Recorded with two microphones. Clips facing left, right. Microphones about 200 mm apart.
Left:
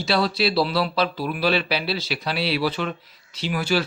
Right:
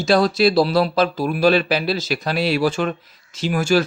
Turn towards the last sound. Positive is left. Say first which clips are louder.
# right 5 dB
turn(degrees=-45)  # may be behind; listen again after turning